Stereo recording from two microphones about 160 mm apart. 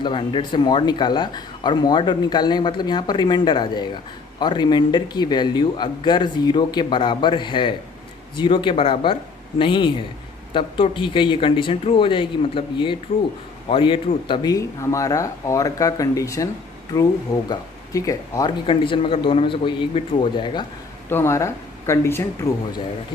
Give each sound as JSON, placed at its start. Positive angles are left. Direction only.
{"t": 0.0, "sound": "speech", "side_deg": 30}
{"t": 17.5, "sound": "speech", "side_deg": 20}
{"t": 18.6, "sound": "speech", "side_deg": 35}
{"t": 21.1, "sound": "speech", "side_deg": 15}